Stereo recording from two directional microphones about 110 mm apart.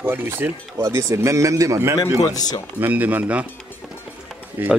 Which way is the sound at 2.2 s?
35° left (ahead or behind).